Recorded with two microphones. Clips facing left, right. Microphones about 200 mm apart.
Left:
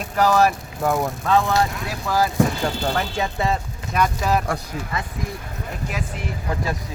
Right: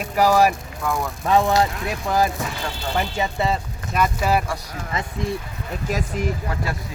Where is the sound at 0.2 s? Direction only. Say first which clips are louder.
Right 1 dB; 10° right (ahead or behind).